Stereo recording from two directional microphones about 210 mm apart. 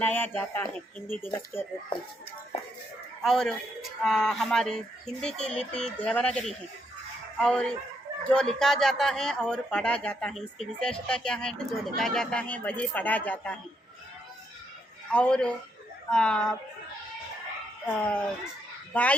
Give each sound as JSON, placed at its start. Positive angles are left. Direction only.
{"t": 0.0, "sound": "speech", "side_deg": 10}
{"t": 3.2, "sound": "a man's voice", "side_deg": 0}
{"t": 15.1, "sound": "a man's voice", "side_deg": 5}
{"t": 17.8, "sound": "a man's voice", "side_deg": 5}